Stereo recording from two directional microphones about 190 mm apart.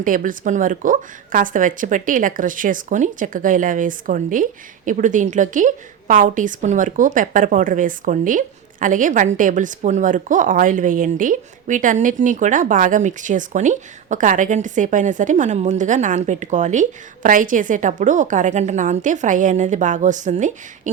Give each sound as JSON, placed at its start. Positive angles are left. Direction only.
{"t": 0.0, "sound": "a woman's voice", "side_deg": -45}